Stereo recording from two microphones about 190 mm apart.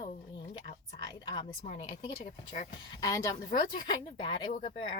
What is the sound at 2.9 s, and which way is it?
Speech, 15° left (ahead or behind).